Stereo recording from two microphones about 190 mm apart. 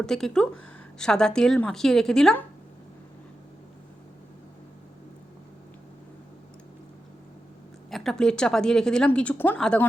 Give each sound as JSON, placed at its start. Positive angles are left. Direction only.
{"t": 0.0, "sound": "a woman's voice", "side_deg": 5}
{"t": 7.9, "sound": "a woman's voice", "side_deg": 0}